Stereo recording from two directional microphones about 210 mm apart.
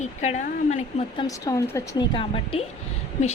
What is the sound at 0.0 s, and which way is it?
Speech, 35° left (ahead or behind).